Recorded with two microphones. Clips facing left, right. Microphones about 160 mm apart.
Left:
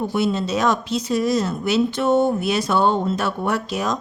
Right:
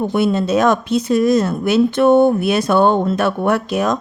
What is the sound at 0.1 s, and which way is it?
Speech, 55° right (ahead or behind).